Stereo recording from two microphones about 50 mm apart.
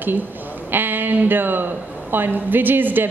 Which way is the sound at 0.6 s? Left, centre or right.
Right.